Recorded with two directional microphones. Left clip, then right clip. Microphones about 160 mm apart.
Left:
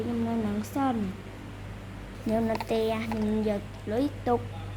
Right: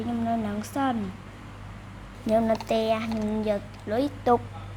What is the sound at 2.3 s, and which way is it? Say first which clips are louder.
A woman's voice: right 5 dB; 55° right (ahead or behind).